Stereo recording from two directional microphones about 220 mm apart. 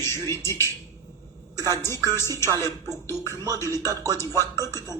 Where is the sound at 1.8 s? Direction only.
10° left (ahead or behind).